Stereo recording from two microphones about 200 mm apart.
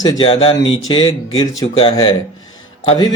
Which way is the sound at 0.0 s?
20° left (ahead or behind).